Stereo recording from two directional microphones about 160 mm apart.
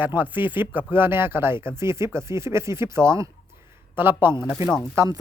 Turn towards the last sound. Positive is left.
turn(degrees=-15)  # may be behind; listen again after turning